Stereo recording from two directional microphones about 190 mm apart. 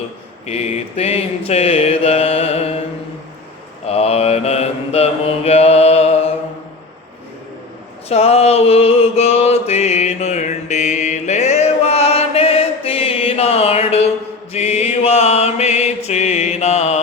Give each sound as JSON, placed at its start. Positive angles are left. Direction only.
{"t": 0.4, "sound": "mantra", "side_deg": 35}
{"t": 3.8, "sound": "mantra", "side_deg": 30}
{"t": 8.1, "sound": "mantra", "side_deg": 35}